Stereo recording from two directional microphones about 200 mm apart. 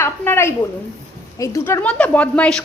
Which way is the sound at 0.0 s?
10° left (ahead or behind).